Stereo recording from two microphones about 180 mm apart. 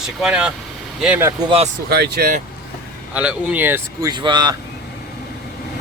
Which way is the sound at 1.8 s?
65° right (ahead or behind).